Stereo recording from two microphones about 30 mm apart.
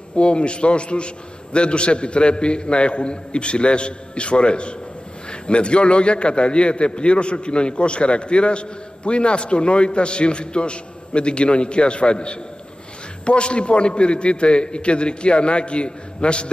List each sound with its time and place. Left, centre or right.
0.1 s a man's voice: left